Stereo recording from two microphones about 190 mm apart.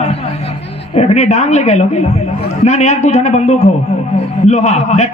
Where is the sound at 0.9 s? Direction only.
35° left (ahead or behind).